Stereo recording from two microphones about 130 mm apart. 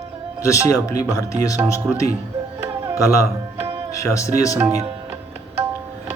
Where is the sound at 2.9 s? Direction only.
25° left (ahead or behind).